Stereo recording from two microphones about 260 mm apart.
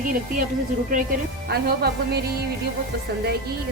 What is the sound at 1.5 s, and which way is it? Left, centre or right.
A woman's voice, right.